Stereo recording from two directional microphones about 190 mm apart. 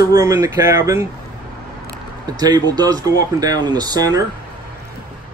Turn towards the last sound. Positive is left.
turn(degrees=-20)  # may be behind; listen again after turning